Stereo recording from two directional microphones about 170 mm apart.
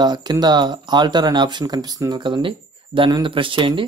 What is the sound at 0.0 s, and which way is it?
Speech, 25° right (ahead or behind).